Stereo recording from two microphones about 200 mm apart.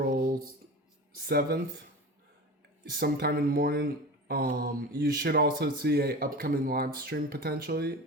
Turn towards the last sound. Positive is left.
turn(degrees=-50)  # may be behind; listen again after turning